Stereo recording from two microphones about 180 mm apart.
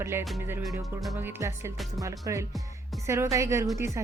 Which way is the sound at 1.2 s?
10° right (ahead or behind).